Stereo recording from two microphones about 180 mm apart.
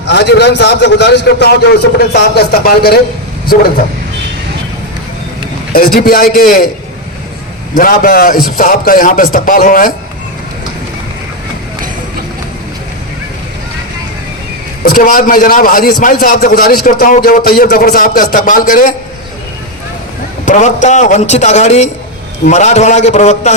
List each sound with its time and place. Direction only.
0.1 s a man's voice: 70° left (ahead or behind)
5.7 s a man's voice: 55° left (ahead or behind)
7.8 s a man's voice: 50° left (ahead or behind)
14.8 s a man's voice: 50° left (ahead or behind)
20.4 s a man's voice: 45° left (ahead or behind)